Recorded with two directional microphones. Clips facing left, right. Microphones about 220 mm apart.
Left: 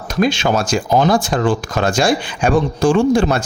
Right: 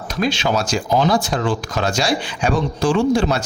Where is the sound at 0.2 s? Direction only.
50° left (ahead or behind).